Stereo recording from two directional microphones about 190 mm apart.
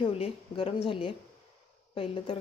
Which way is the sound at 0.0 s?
30° left (ahead or behind).